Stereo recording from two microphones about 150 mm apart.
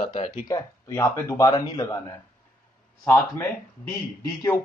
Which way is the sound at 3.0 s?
15° left (ahead or behind).